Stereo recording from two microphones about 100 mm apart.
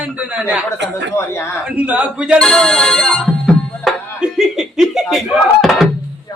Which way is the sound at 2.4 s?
5° left (ahead or behind).